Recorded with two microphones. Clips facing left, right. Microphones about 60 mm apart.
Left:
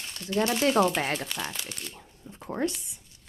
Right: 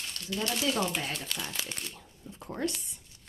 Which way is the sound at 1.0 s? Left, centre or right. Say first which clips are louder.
Left 7 dB; left.